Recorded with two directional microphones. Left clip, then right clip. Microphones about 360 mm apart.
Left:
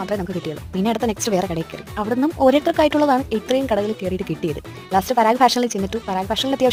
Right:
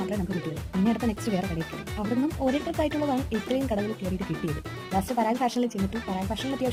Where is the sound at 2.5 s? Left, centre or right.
Left.